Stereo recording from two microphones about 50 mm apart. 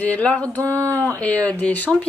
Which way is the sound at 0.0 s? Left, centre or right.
Left.